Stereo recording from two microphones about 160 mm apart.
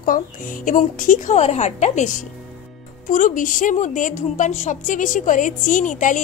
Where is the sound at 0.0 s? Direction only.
60° left (ahead or behind).